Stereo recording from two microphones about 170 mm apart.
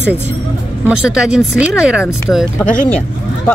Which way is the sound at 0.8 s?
5° right (ahead or behind).